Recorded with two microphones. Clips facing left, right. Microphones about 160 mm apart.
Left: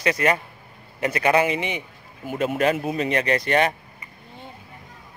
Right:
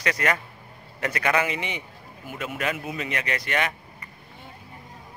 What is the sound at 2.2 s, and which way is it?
Speech, 35° left (ahead or behind).